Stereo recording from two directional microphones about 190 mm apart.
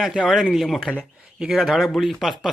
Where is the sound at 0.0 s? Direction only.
Centre (ahead or behind).